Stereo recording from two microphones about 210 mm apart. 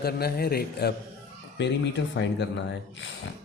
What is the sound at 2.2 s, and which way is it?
Speech, 55° left (ahead or behind).